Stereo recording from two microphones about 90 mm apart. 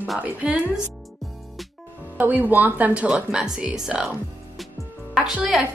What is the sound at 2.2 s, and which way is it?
A woman's voice, 20° right (ahead or behind).